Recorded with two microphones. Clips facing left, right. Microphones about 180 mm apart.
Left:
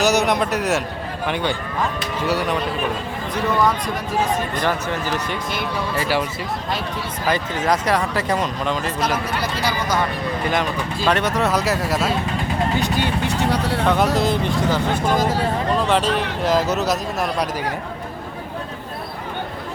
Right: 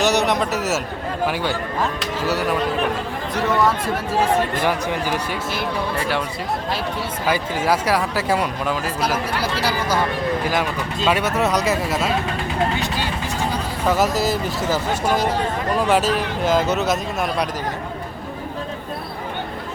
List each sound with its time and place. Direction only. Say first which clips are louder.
0.0 s a man's voice: left 1 dB; centre (ahead or behind)
4.5 s speech: right 1 dB; 10° right (ahead or behind)
6.0 s speech: left 4 dB; 5° left (ahead or behind)
7.3 s speech: even; 10° right (ahead or behind)
13.0 s vehicle: left 3 dB; 65° left (ahead or behind)
13.8 s speech: right 1 dB; 5° right (ahead or behind)